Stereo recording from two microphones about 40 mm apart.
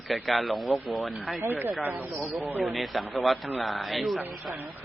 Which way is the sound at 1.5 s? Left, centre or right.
Right.